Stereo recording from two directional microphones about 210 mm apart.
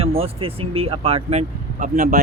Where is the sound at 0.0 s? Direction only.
25° right (ahead or behind).